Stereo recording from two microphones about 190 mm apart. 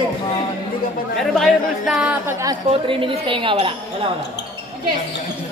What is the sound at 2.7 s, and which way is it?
Speech, 30° right (ahead or behind).